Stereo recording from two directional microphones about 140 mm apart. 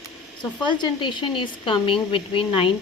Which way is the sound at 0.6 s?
35° left (ahead or behind).